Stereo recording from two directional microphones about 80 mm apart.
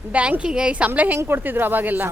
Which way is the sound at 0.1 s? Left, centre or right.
Centre.